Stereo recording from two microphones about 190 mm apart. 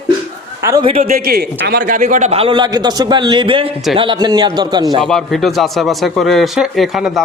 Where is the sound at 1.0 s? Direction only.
50° right (ahead or behind); by 5.0 s 20° right (ahead or behind).